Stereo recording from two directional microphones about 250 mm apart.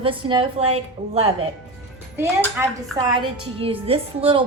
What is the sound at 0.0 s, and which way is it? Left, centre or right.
A woman's voice, centre.